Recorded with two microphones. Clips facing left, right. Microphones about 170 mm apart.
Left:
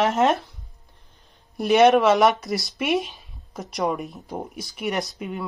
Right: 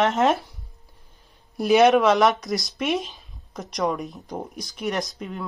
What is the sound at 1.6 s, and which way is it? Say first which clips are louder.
Speech: even; centre (ahead or behind).